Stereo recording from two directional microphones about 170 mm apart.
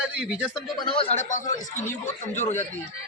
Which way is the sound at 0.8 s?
35° left (ahead or behind).